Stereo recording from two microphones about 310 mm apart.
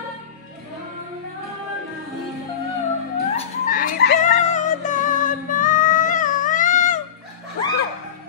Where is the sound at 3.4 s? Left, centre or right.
Left.